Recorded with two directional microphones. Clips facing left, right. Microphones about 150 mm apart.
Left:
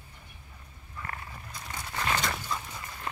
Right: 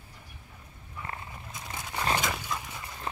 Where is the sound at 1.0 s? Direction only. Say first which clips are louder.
Right 1 dB; 20° right (ahead or behind).